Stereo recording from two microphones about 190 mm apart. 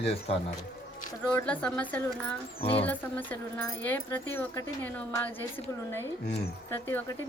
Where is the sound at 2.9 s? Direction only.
10° left (ahead or behind).